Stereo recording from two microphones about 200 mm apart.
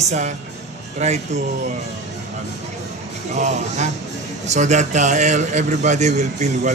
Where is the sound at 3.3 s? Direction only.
35° right (ahead or behind).